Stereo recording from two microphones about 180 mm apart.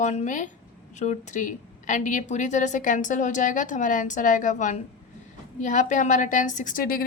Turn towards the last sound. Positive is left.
turn(degrees=55)  # may be behind; listen again after turning